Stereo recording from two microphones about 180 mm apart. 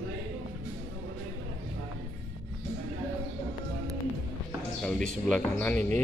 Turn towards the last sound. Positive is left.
turn(degrees=10)  # may be behind; listen again after turning